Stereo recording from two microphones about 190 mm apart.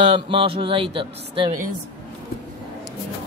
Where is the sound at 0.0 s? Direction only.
25° right (ahead or behind).